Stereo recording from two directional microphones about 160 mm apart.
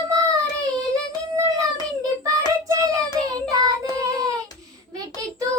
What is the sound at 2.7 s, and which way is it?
Child singing, 20° right (ahead or behind).